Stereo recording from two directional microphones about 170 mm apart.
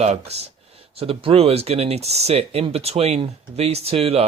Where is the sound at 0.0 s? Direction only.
40° right (ahead or behind).